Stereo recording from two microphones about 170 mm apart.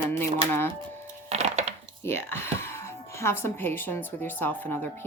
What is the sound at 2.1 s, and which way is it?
Speech, 15° left (ahead or behind).